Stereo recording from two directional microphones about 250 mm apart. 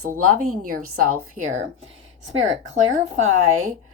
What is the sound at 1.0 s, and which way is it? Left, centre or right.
Speech, right.